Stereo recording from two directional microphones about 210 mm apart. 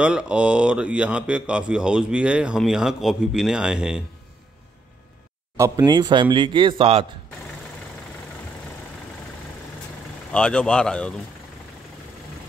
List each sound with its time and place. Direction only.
0.0 s speech: 5° right (ahead or behind)
5.9 s a man's voice: 20° right (ahead or behind)
10.3 s speech: 5° left (ahead or behind)